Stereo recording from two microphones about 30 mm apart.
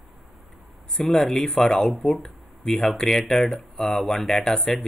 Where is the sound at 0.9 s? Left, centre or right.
Centre.